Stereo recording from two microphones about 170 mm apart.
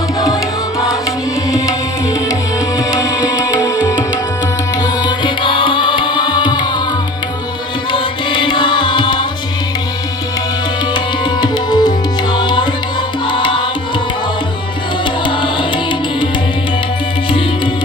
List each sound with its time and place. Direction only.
2.7 s music: 20° left (ahead or behind)
7.9 s music: 30° left (ahead or behind)
10.9 s tabla: 25° left (ahead or behind)
13.2 s music: 30° left (ahead or behind)
15.0 s music: 30° left (ahead or behind)